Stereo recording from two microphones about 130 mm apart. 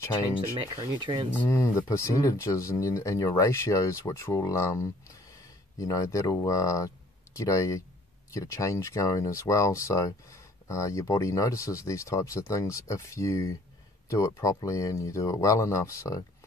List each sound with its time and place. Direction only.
0.6 s speech: 40° right (ahead or behind)
1.4 s speech: 25° left (ahead or behind)